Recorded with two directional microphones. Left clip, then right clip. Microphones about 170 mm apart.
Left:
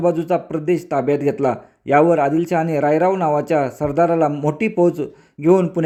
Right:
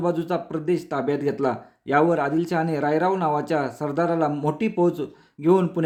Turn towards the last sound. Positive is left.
turn(degrees=20)  # may be behind; listen again after turning